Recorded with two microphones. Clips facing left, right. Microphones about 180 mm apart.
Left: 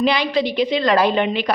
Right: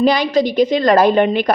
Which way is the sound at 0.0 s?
45° right (ahead or behind).